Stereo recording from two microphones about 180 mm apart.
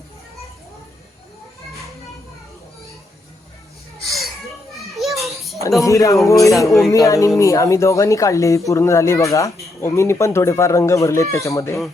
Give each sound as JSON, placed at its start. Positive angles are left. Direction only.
{"t": 4.0, "sound": "a sound", "side_deg": 0}
{"t": 4.9, "sound": "children playing", "side_deg": 0}
{"t": 5.8, "sound": "speech", "side_deg": 20}